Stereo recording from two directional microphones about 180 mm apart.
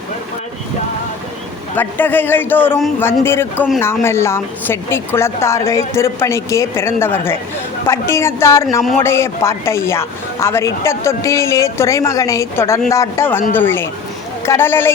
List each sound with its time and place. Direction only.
1.7 s speech: 10° left (ahead or behind)